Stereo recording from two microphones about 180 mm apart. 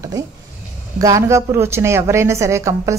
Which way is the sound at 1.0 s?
15° right (ahead or behind).